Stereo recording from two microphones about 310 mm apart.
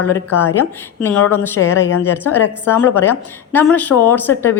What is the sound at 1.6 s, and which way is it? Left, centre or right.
Speech, left.